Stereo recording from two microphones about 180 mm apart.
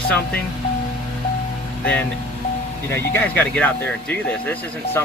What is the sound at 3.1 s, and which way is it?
Speech, 10° left (ahead or behind).